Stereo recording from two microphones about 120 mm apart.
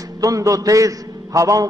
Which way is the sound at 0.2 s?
30° right (ahead or behind).